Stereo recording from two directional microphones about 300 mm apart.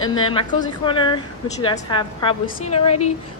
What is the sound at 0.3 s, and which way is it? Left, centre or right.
A woman's voice, centre.